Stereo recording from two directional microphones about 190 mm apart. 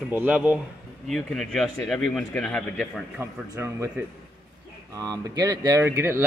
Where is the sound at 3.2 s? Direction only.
15° right (ahead or behind).